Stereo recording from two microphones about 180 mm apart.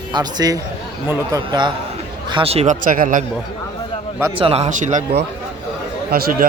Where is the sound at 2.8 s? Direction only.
50° right (ahead or behind).